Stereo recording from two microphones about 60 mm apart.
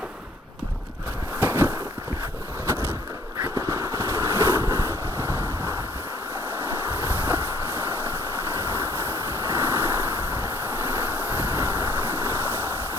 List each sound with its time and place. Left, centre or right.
1.4 s a sound: right
3.4 s fireworks: right
4.4 s vehicle: right
6.3 s ocean: right